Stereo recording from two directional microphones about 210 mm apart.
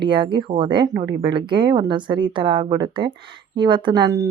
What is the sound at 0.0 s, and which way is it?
Speech, 25° right (ahead or behind).